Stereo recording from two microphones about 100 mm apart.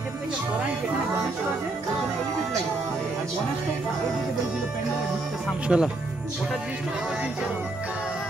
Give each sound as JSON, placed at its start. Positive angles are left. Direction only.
{"t": 5.7, "sound": "speech", "side_deg": -5}